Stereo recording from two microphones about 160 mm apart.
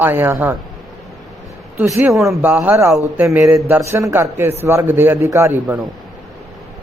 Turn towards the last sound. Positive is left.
turn(degrees=-15)  # may be behind; listen again after turning